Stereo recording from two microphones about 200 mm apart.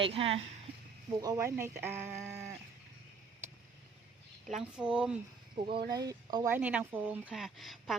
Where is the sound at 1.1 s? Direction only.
20° right (ahead or behind).